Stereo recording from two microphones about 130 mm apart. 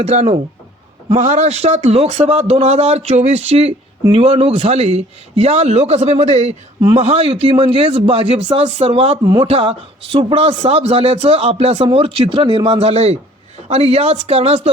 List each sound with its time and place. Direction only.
0.0 s a man's voice: 55° right (ahead or behind)